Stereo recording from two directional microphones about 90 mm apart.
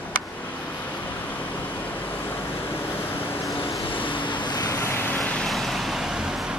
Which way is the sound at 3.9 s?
70° left (ahead or behind).